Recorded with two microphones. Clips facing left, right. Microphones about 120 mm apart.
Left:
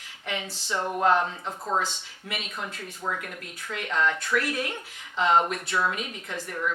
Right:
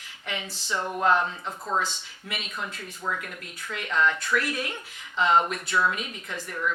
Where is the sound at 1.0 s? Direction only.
40° left (ahead or behind).